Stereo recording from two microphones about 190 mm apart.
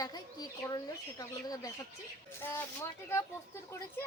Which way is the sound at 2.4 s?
10° left (ahead or behind).